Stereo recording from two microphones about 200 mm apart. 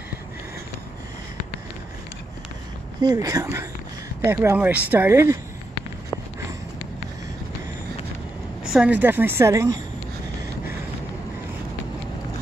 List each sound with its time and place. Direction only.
3.0 s speech: 20° right (ahead or behind)
8.6 s speech: 5° right (ahead or behind)